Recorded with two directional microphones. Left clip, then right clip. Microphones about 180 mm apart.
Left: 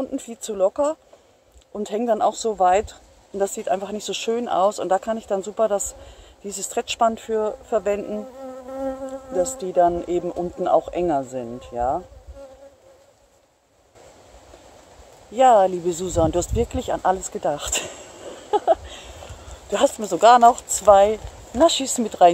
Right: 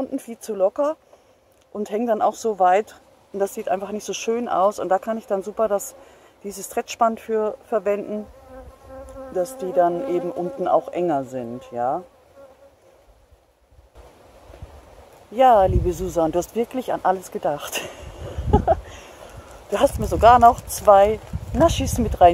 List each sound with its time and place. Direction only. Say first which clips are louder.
0.0 s speech: even; centre (ahead or behind)
9.4 s speech: left 1 dB; centre (ahead or behind)
15.3 s speech: even; centre (ahead or behind)
17.3 s a sound: even; centre (ahead or behind)
19.7 s speech: even; centre (ahead or behind)